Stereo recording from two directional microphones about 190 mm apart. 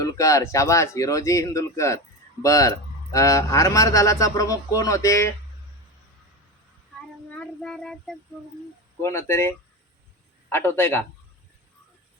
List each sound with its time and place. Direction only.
0.0 s speech: 15° left (ahead or behind)
7.3 s child singing: 5° left (ahead or behind)
9.0 s speech: 15° left (ahead or behind)